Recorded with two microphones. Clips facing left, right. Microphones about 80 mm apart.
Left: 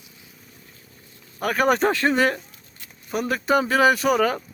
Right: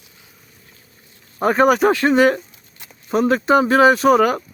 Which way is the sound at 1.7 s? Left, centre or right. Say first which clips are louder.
Right 2 dB; centre.